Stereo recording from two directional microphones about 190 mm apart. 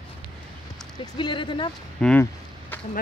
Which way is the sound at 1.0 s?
25° left (ahead or behind).